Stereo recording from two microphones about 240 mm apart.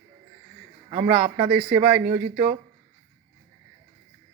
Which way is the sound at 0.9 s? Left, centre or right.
Right.